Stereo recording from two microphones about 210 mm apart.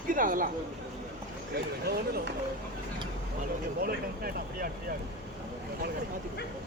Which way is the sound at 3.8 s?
45° right (ahead or behind).